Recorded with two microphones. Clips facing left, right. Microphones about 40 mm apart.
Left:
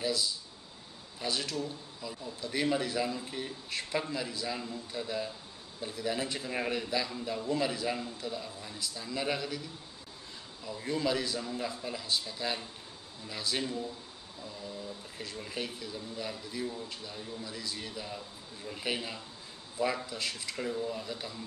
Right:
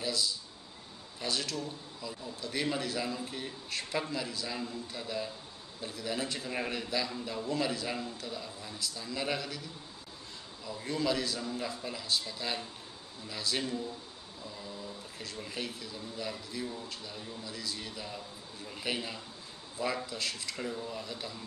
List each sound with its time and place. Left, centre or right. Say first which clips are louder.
0.0 s speech: left 1 dB; centre
10.7 s speech: left 1 dB; centre
15.1 s speech: left 2 dB; centre